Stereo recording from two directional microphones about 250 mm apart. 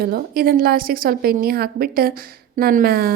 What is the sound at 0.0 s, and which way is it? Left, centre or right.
A woman's voice, right.